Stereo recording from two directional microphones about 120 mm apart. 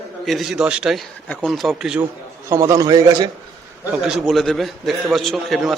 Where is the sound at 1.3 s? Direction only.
5° left (ahead or behind).